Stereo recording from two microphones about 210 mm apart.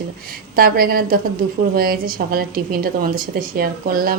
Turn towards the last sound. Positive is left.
turn(degrees=-45)  # may be behind; listen again after turning